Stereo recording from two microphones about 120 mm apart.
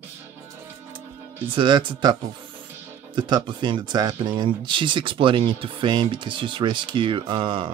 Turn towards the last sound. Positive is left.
turn(degrees=-45)  # may be behind; listen again after turning